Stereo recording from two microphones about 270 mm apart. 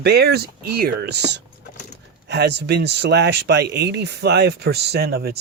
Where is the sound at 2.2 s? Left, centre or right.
Right.